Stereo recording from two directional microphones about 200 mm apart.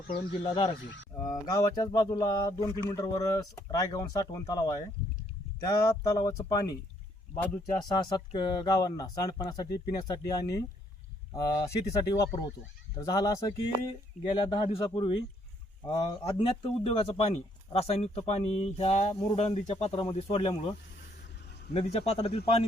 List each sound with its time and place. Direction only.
0.1 s speech: 25° left (ahead or behind)
9.6 s speech: 55° left (ahead or behind)
9.9 s speech: 20° left (ahead or behind)
14.3 s speech: 25° left (ahead or behind)
21.7 s speech: 30° left (ahead or behind)